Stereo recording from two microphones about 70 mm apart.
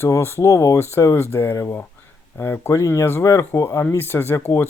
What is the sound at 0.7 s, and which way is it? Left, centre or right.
Speech, left.